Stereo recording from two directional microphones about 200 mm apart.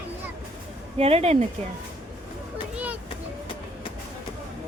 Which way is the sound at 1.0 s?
30° right (ahead or behind).